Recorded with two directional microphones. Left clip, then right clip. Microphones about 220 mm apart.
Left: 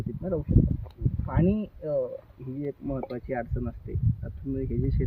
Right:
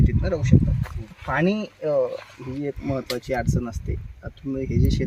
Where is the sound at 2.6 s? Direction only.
55° right (ahead or behind).